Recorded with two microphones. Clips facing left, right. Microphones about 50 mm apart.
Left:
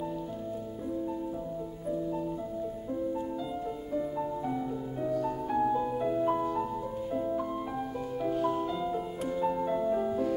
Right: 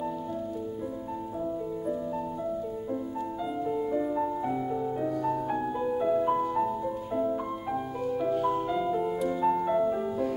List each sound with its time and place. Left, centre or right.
3.6 s music: right
8.2 s music: centre